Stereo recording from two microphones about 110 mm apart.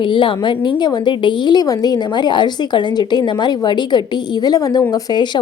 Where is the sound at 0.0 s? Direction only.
50° left (ahead or behind).